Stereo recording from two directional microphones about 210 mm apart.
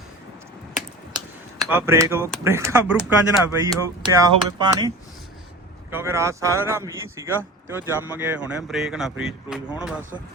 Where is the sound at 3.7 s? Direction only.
15° right (ahead or behind).